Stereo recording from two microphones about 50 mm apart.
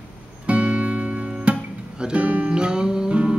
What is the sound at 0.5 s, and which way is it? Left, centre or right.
Music, right.